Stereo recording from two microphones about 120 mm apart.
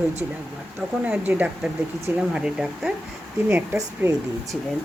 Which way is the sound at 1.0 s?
15° right (ahead or behind).